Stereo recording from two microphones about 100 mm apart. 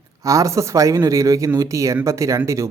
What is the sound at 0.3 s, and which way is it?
Speech, 35° right (ahead or behind).